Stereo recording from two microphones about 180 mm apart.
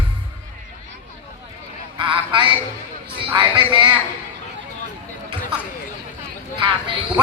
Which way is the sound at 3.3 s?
25° right (ahead or behind).